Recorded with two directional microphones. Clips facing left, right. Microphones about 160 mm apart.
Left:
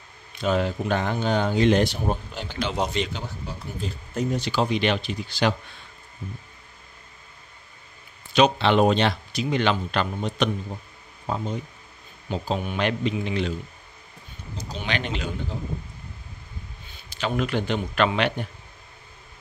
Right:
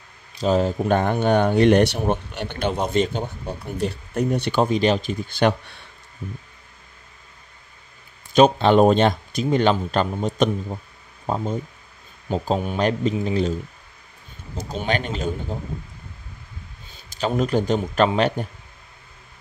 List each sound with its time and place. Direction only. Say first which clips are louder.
0.3 s speech: right 4 dB; 35° right (ahead or behind); by 2.7 s 60° right (ahead or behind)
2.9 s speech: right 7 dB; 50° right (ahead or behind)
3.7 s speech: right 6 dB; 70° right (ahead or behind); by 5.6 s 50° right (ahead or behind)
8.3 s a man's voice: right 4 dB; 45° right (ahead or behind)
14.6 s speech: right 5 dB; 50° right (ahead or behind)
17.1 s a man's voice: right 4 dB; 40° right (ahead or behind)